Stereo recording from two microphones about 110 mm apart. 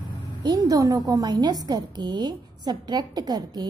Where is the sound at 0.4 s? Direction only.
35° right (ahead or behind).